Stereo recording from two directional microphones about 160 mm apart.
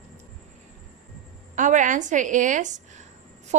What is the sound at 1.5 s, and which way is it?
A woman's voice, 55° right (ahead or behind).